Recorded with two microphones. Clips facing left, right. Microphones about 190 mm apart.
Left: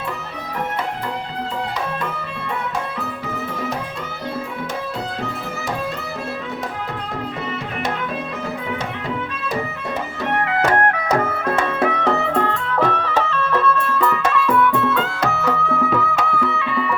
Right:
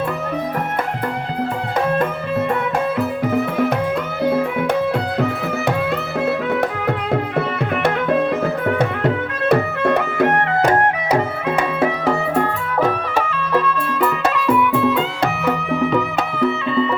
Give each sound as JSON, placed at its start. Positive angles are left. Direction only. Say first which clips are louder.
{"t": 8.8, "sound": "music", "louder": "right 7 dB", "side_deg": -65}
{"t": 10.6, "sound": "music", "louder": "right 1 dB", "side_deg": -20}
{"t": 11.1, "sound": "music", "louder": "right 1 dB", "side_deg": -10}